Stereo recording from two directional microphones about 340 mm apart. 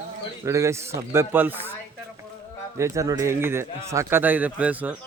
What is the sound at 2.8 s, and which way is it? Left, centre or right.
A man's voice, centre.